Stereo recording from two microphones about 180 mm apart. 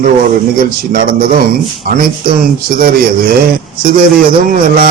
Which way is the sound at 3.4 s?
50° right (ahead or behind).